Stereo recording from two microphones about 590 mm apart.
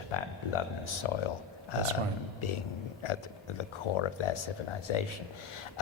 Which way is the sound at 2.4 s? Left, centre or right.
Left.